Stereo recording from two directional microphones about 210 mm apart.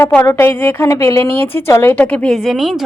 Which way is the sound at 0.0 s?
10° left (ahead or behind).